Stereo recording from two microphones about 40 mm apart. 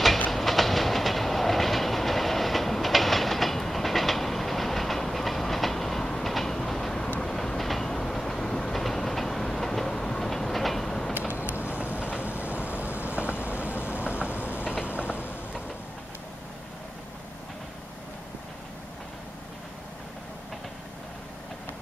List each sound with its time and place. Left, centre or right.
0.3 s train: centre
11.6 s train: right
12.2 s vehicle: right
15.0 s mechanisms: right